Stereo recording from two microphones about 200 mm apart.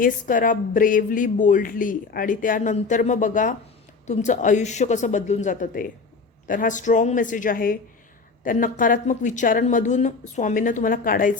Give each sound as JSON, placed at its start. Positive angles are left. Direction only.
{"t": 0.0, "sound": "speech", "side_deg": 40}